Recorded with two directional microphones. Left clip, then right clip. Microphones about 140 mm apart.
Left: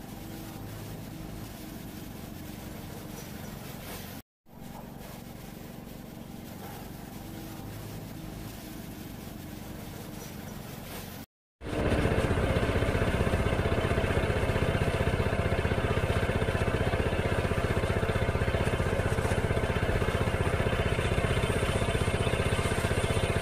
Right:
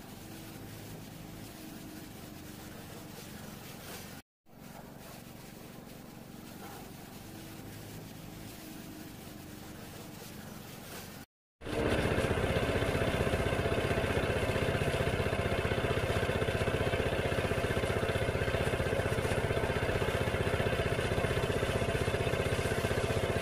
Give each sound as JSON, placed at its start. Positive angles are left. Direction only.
{"t": 12.1, "sound": "vehicle", "side_deg": -40}